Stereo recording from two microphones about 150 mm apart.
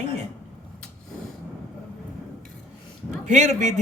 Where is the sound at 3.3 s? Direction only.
50° right (ahead or behind).